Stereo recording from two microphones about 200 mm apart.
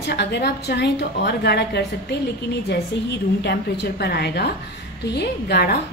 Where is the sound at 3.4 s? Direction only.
55° left (ahead or behind).